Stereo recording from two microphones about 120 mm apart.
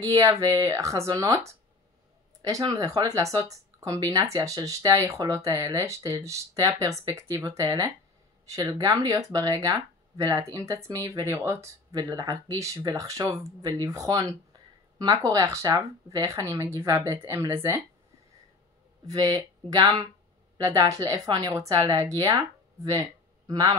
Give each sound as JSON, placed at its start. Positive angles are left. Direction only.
{"t": 0.0, "sound": "speech", "side_deg": -30}
{"t": 19.0, "sound": "a woman's voice", "side_deg": -30}